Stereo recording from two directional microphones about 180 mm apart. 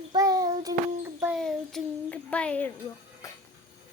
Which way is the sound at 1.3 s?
Centre (ahead or behind).